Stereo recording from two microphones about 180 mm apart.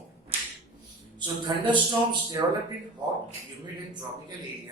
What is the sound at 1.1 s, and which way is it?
A man's voice, 25° right (ahead or behind).